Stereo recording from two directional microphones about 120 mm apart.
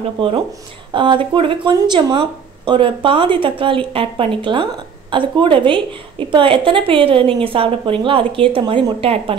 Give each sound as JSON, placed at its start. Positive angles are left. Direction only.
{"t": 0.2, "sound": "speech", "side_deg": -50}